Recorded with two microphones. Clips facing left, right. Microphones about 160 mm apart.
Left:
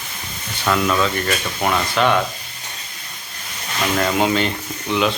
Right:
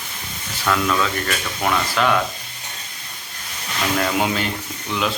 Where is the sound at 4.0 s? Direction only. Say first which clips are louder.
Left 4 dB; centre (ahead or behind).